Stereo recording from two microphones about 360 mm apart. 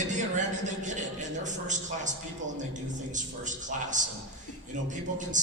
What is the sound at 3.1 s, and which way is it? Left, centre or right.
Speech, right.